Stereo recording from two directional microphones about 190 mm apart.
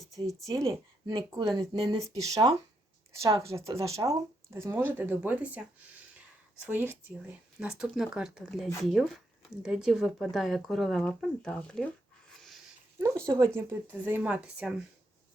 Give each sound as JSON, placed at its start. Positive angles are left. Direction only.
{"t": 0.0, "sound": "speech", "side_deg": 0}
{"t": 0.7, "sound": "speech", "side_deg": -20}
{"t": 13.2, "sound": "speech", "side_deg": -15}